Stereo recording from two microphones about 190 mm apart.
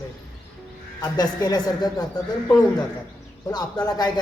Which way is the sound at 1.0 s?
20° left (ahead or behind).